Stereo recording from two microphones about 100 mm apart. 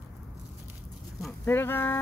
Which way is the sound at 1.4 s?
20° left (ahead or behind).